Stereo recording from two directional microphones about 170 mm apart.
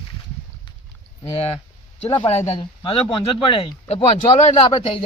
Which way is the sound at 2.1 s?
35° left (ahead or behind).